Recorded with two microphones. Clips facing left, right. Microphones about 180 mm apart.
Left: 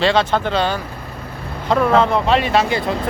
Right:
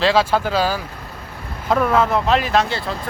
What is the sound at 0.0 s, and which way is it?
Speech, 5° right (ahead or behind).